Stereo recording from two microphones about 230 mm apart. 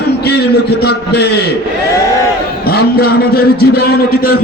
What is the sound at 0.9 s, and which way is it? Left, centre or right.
Speech, left.